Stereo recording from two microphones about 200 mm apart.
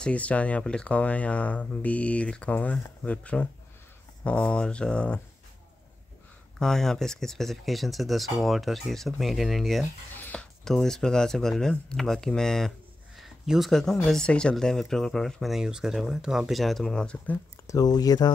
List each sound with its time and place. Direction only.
0.0 s speech: 5° left (ahead or behind)
6.6 s speech: centre (ahead or behind)
17.6 s speech: 20° left (ahead or behind)